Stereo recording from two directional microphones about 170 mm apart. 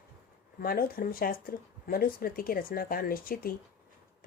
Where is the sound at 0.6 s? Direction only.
60° left (ahead or behind).